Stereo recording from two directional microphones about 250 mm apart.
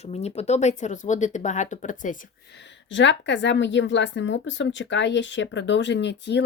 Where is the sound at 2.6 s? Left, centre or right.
Left.